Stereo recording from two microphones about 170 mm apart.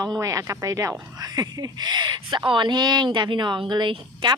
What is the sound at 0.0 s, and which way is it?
Speech, 20° right (ahead or behind).